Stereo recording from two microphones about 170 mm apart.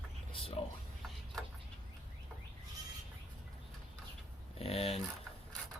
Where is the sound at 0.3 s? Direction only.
35° left (ahead or behind).